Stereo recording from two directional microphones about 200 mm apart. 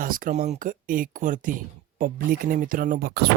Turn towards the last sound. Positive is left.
turn(degrees=-50)  # may be behind; listen again after turning